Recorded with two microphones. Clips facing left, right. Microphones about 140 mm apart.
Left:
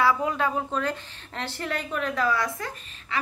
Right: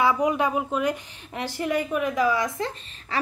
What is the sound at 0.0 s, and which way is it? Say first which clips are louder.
A woman's voice: right 2 dB; 15° right (ahead or behind).